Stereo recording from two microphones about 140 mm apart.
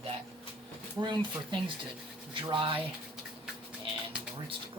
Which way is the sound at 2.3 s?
35° right (ahead or behind).